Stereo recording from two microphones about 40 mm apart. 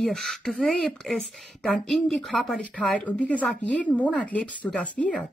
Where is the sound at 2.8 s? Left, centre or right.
Left.